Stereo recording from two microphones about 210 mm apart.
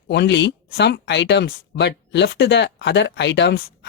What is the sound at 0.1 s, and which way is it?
Speech, 55° left (ahead or behind).